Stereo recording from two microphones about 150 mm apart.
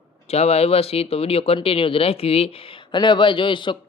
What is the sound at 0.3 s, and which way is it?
Speech, 45° left (ahead or behind).